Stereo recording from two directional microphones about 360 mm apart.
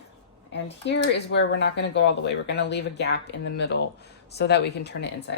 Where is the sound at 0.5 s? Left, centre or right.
Left.